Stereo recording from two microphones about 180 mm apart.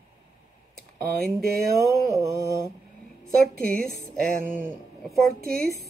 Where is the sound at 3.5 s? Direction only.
55° right (ahead or behind).